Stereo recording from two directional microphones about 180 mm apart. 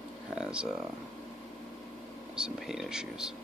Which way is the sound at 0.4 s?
5° right (ahead or behind).